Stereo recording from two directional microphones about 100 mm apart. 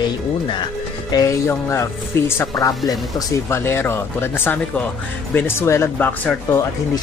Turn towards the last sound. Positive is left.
turn(degrees=20)  # may be behind; listen again after turning